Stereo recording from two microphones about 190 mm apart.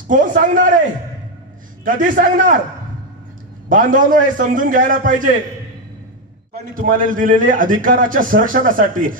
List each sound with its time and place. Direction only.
0.1 s a man's voice: 45° right (ahead or behind)
1.9 s a man's voice: 45° right (ahead or behind)
3.6 s a man's voice: 45° right (ahead or behind)
6.5 s a man's voice: 50° right (ahead or behind)